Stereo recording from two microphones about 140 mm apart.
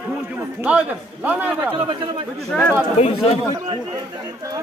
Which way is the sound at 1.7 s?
40° right (ahead or behind).